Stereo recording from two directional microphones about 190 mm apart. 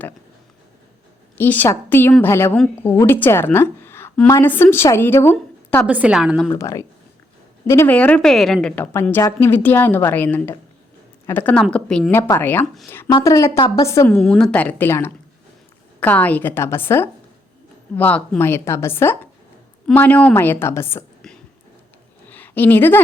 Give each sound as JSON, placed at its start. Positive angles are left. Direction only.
{"t": 1.4, "sound": "a woman's voice", "side_deg": 10}
{"t": 5.8, "sound": "a woman's voice", "side_deg": -5}
{"t": 6.5, "sound": "a woman's voice", "side_deg": 15}
{"t": 13.1, "sound": "a woman's voice", "side_deg": 20}
{"t": 14.2, "sound": "a woman's voice", "side_deg": 5}
{"t": 22.3, "sound": "a sound", "side_deg": 10}